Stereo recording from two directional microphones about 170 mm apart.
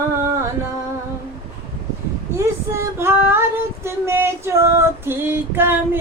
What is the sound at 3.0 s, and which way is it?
Female singing, 15° right (ahead or behind).